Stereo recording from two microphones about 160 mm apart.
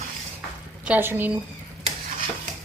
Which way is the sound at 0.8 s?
10° right (ahead or behind).